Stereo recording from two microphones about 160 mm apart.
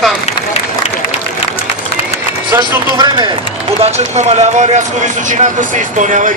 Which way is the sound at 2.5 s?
25° right (ahead or behind).